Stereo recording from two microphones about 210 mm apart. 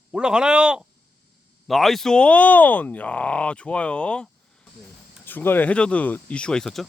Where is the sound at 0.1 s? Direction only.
5° right (ahead or behind).